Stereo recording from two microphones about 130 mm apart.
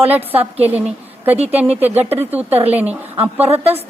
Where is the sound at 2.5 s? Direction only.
50° right (ahead or behind).